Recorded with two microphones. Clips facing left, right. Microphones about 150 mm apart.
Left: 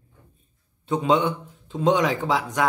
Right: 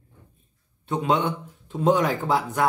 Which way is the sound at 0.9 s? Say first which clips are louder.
Left 2 dB; centre (ahead or behind).